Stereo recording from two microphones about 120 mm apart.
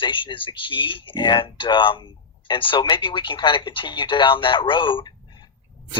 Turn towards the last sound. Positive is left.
turn(degrees=40)  # may be behind; listen again after turning